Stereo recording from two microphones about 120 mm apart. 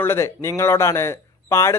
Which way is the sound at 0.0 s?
20° left (ahead or behind).